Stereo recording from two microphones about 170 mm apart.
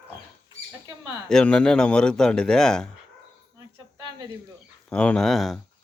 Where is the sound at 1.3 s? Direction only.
5° left (ahead or behind).